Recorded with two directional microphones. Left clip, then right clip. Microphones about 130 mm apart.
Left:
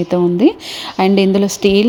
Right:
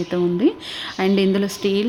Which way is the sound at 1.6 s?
45° left (ahead or behind).